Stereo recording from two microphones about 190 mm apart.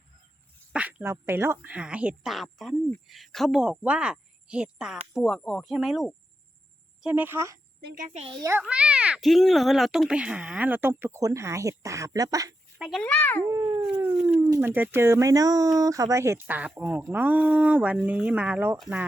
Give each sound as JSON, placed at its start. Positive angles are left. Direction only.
{"t": 0.7, "sound": "a child's voice", "side_deg": -5}
{"t": 7.8, "sound": "a child's voice", "side_deg": -50}
{"t": 8.2, "sound": "a child's voice", "side_deg": -25}
{"t": 8.4, "sound": "a child's voice", "side_deg": -10}
{"t": 12.8, "sound": "a child's voice", "side_deg": 5}
{"t": 13.5, "sound": "dog", "side_deg": -15}
{"t": 14.0, "sound": "a child's voice", "side_deg": -10}